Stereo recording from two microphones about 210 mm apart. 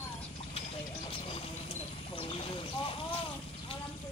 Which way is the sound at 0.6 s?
25° left (ahead or behind).